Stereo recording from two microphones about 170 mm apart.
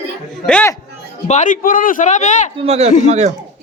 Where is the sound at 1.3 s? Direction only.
45° left (ahead or behind).